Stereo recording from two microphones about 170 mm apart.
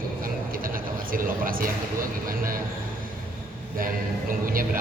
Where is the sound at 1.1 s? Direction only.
55° right (ahead or behind).